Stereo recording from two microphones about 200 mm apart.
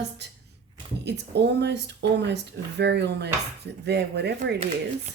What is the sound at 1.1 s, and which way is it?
Speech, 55° right (ahead or behind).